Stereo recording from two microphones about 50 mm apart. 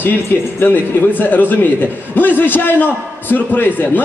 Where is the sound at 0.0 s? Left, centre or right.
Left.